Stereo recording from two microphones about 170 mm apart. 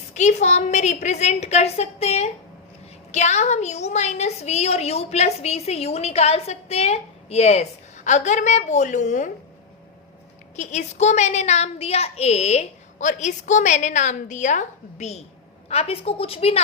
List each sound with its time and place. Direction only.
0.1 s a woman's voice: 45° left (ahead or behind)
10.6 s a woman's voice: 45° left (ahead or behind)